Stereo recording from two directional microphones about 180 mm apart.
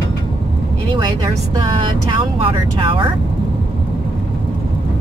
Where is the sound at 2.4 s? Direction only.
30° right (ahead or behind).